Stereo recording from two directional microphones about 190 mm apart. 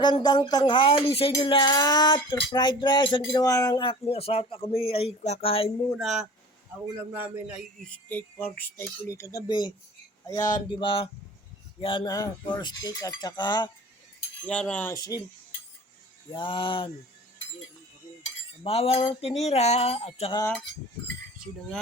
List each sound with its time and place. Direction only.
0.0 s speech: 20° left (ahead or behind)
5.9 s a man's voice: centre (ahead or behind)
8.1 s speech: 10° left (ahead or behind)
14.4 s speech: 5° left (ahead or behind)
16.3 s speech: 25° left (ahead or behind)
18.6 s a sound: 30° left (ahead or behind)